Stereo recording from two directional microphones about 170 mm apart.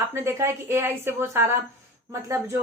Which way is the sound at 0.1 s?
15° right (ahead or behind).